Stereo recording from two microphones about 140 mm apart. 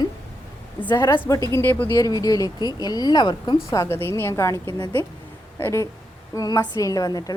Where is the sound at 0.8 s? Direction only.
15° left (ahead or behind); by 3.6 s 30° left (ahead or behind).